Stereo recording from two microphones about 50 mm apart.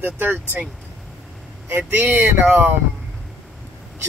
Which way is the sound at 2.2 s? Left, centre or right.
Right.